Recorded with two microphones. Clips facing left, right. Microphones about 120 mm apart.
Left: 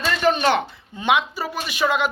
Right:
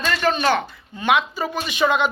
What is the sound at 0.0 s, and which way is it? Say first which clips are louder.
Speech: left 1 dB; 15° left (ahead or behind).